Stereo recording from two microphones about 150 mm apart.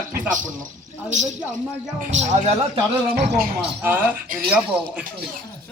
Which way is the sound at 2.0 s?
50° right (ahead or behind).